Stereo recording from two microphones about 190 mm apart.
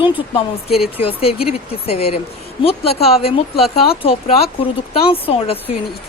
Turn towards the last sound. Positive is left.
turn(degrees=30)  # may be behind; listen again after turning